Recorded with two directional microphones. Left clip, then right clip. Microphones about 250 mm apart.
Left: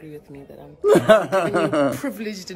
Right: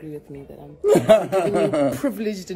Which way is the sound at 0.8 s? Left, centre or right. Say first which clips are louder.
Left 1 dB; centre.